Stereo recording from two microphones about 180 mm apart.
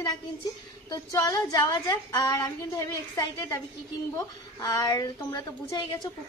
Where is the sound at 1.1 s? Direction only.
20° left (ahead or behind).